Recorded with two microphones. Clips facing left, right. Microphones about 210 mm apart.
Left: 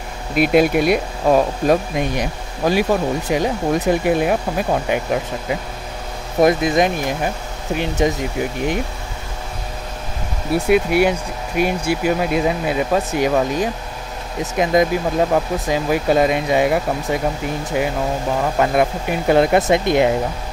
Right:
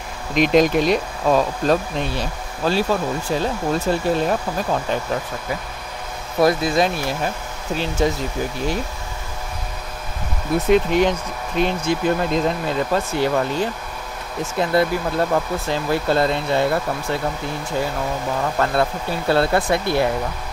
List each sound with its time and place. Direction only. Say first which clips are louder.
0.3 s speech: left 1 dB; 10° left (ahead or behind)
10.5 s speech: left 1 dB; 10° left (ahead or behind)